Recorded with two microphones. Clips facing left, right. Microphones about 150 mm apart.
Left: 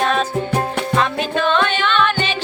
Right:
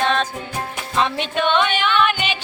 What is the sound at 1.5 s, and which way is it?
Music, 10° right (ahead or behind).